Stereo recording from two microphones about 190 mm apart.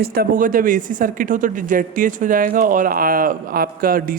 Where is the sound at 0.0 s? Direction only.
55° right (ahead or behind).